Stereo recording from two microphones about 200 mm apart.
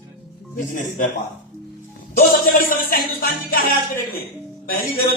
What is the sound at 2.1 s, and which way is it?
Music, 45° left (ahead or behind).